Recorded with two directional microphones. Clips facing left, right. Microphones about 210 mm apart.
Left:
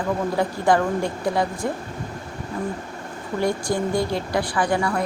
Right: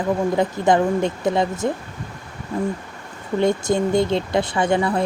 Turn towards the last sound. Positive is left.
turn(degrees=-20)  # may be behind; listen again after turning